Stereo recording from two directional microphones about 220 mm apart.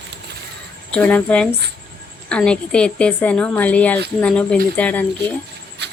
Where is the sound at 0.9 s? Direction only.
5° left (ahead or behind).